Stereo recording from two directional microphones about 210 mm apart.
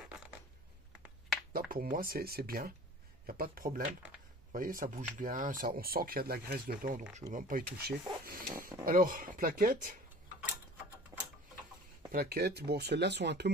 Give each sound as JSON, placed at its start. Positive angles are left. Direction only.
{"t": 1.5, "sound": "speech", "side_deg": -40}
{"t": 11.1, "sound": "tick-tock", "side_deg": -15}
{"t": 12.1, "sound": "speech", "side_deg": -50}